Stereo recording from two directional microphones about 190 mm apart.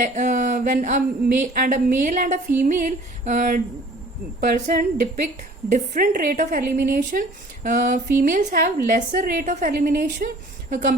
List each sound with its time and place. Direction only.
0.0 s a woman's voice: 40° right (ahead or behind)